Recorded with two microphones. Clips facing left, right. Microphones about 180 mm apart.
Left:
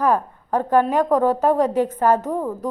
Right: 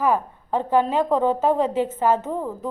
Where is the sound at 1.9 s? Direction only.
25° right (ahead or behind).